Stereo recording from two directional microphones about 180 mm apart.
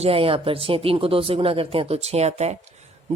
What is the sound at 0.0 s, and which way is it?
Speech, 30° right (ahead or behind).